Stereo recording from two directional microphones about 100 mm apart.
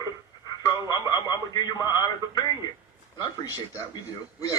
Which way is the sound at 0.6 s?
40° left (ahead or behind).